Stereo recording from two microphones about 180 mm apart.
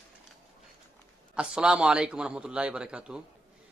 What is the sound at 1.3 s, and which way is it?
A man's voice, 5° right (ahead or behind).